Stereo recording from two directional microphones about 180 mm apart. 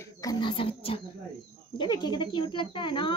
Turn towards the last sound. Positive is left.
turn(degrees=25)  # may be behind; listen again after turning